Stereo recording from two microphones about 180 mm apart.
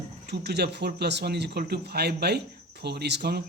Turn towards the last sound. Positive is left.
turn(degrees=-65)  # may be behind; listen again after turning